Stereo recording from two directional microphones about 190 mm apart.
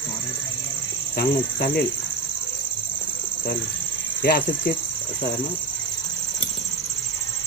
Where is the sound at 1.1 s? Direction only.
50° left (ahead or behind).